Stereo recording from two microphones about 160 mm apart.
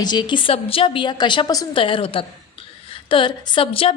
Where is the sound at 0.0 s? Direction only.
25° left (ahead or behind).